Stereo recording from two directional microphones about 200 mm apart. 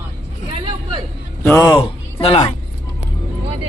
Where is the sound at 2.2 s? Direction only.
30° left (ahead or behind).